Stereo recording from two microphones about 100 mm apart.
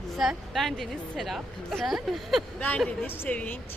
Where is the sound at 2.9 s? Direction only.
15° left (ahead or behind).